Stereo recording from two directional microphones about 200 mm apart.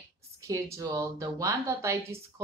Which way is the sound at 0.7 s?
15° right (ahead or behind).